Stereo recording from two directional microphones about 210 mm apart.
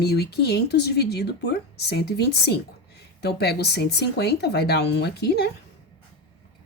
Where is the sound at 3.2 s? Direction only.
50° left (ahead or behind).